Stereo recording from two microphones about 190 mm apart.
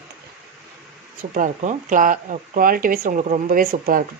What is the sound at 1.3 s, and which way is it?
Speech, 40° right (ahead or behind).